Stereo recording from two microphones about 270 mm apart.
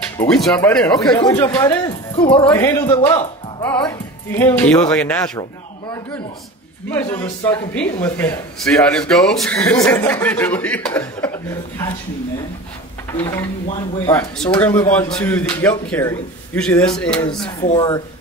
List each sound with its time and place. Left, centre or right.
0.2 s a man's voice: centre
6.9 s speech: centre
13.2 s a man's voice: centre
17.6 s speech: centre